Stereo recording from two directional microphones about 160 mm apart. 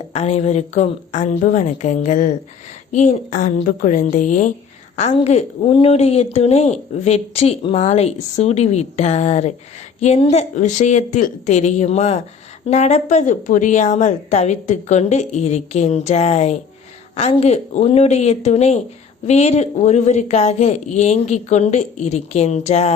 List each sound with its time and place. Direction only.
0.1 s a woman's voice: 40° left (ahead or behind)